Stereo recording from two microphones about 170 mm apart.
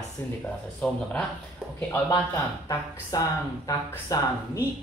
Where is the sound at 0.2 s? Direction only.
15° left (ahead or behind).